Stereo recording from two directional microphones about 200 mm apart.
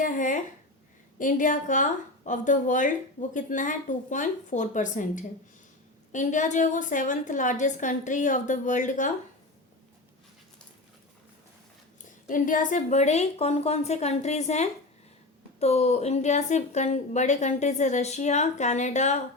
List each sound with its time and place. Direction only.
0.0 s a woman's voice: 40° left (ahead or behind)
12.3 s a woman's voice: 40° left (ahead or behind)